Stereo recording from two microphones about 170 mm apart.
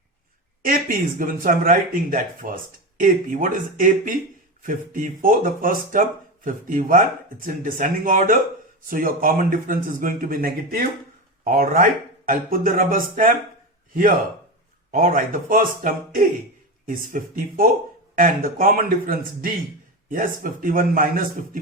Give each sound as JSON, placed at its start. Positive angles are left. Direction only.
{"t": 0.6, "sound": "speech", "side_deg": -55}
{"t": 14.9, "sound": "speech", "side_deg": -55}